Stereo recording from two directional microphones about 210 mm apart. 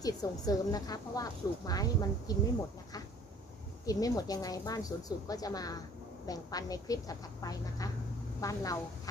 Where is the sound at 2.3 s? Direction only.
15° left (ahead or behind).